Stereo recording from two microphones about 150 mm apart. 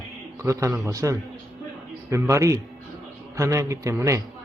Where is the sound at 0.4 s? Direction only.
20° right (ahead or behind).